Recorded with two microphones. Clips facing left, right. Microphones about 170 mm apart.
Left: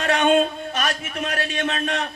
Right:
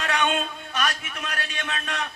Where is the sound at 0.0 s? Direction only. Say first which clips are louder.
Left 8 dB; 30° left (ahead or behind).